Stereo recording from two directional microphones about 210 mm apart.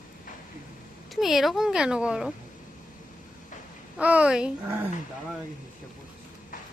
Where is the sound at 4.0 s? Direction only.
5° right (ahead or behind).